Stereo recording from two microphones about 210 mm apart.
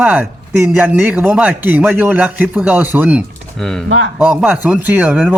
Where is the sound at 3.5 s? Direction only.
5° left (ahead or behind).